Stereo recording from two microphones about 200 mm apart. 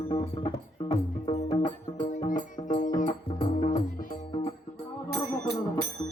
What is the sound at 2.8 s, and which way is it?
Music, 40° left (ahead or behind).